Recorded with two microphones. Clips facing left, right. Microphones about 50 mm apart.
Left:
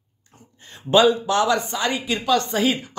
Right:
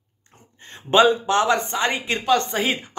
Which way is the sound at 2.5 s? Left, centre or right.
Right.